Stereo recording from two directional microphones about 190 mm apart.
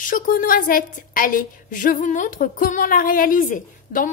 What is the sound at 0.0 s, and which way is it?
A woman's voice, 45° left (ahead or behind).